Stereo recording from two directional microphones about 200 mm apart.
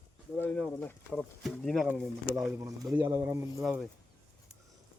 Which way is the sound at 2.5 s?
10° right (ahead or behind).